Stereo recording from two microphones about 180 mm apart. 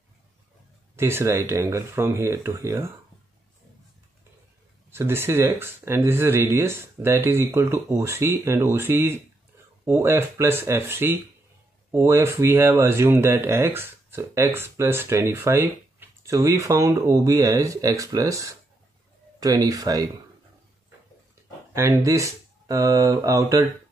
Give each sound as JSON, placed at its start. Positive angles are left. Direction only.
{"t": 0.9, "sound": "speech", "side_deg": -15}
{"t": 4.9, "sound": "speech", "side_deg": -15}
{"t": 21.7, "sound": "speech", "side_deg": -15}